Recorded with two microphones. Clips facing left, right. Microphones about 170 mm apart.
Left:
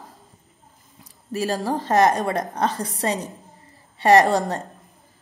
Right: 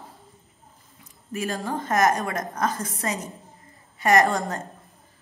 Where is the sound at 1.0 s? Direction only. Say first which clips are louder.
Left 4 dB; 35° left (ahead or behind).